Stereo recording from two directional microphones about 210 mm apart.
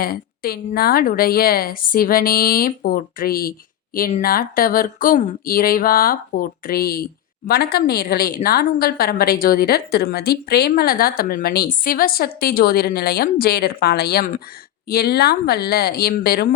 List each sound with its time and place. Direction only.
0.0 s speech: 45° left (ahead or behind)